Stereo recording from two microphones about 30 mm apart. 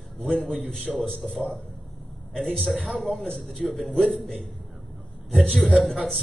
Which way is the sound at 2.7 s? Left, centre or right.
Centre.